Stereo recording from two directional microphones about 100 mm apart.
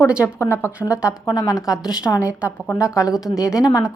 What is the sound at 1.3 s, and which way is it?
Speech, 35° left (ahead or behind).